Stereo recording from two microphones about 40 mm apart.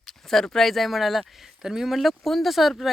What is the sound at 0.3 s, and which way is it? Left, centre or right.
Speech, centre.